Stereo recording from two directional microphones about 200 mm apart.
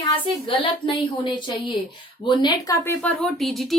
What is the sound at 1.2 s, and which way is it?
Speech, 25° left (ahead or behind).